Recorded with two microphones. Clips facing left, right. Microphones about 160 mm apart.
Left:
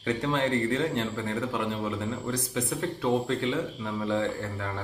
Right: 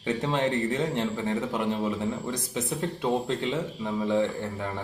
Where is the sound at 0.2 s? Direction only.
20° right (ahead or behind).